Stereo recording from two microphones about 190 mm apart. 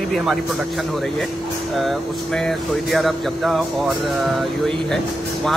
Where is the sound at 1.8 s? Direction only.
Centre (ahead or behind).